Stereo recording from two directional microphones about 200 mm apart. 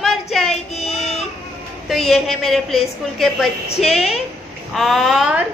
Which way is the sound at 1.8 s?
Centre (ahead or behind).